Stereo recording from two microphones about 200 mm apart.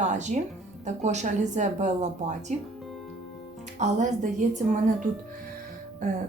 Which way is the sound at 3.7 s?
35° right (ahead or behind).